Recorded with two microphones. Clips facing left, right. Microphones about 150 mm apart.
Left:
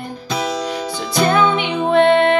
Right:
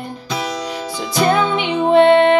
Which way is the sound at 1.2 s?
25° right (ahead or behind).